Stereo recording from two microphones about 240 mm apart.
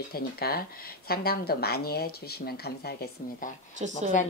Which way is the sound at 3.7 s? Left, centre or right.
Right.